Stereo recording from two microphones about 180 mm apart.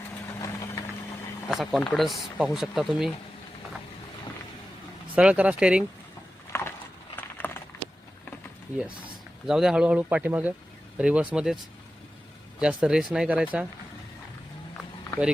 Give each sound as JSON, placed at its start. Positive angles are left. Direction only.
{"t": 0.4, "sound": "vehicle", "side_deg": 20}
{"t": 1.5, "sound": "speech", "side_deg": 0}
{"t": 5.1, "sound": "speech", "side_deg": -5}
{"t": 6.5, "sound": "a sound", "side_deg": 15}
{"t": 9.5, "sound": "speech", "side_deg": -5}
{"t": 12.5, "sound": "speech", "side_deg": -5}